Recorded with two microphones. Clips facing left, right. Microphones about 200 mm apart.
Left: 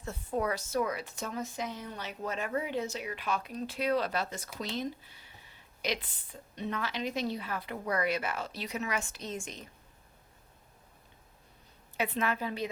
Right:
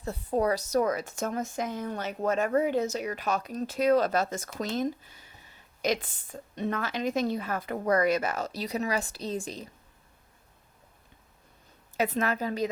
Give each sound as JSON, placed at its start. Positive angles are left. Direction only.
{"t": 0.0, "sound": "a woman's voice", "side_deg": -35}
{"t": 11.9, "sound": "a woman's voice", "side_deg": -40}